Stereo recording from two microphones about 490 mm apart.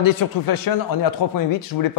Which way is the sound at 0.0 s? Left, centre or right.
Left.